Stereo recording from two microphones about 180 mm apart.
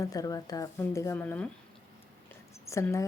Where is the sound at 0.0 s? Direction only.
20° left (ahead or behind).